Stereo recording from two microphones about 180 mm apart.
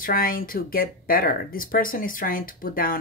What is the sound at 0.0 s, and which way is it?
Speech, 55° left (ahead or behind).